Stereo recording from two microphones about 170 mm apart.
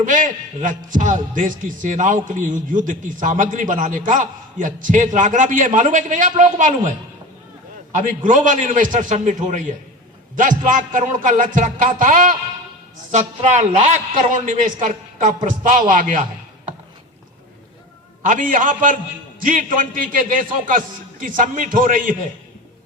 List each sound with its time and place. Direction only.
0.0 s a man's voice: 50° right (ahead or behind)
7.9 s a man's voice: 50° right (ahead or behind)
18.2 s a man's voice: 50° right (ahead or behind)